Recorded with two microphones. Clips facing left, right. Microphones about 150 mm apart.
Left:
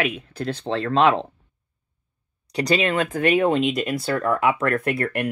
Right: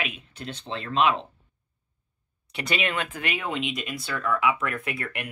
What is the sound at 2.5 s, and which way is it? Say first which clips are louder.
Speech: left 8 dB; 35° left (ahead or behind).